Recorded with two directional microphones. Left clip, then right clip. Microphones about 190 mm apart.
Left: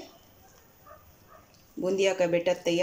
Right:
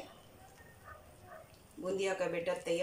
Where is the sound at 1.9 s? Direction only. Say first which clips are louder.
Left 10 dB; 45° left (ahead or behind).